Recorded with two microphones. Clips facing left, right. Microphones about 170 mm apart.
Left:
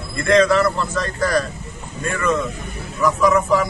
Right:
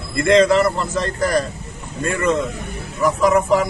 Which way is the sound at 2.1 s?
25° right (ahead or behind).